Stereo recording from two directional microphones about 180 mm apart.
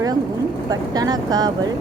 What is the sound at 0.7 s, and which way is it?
Speech, 20° right (ahead or behind).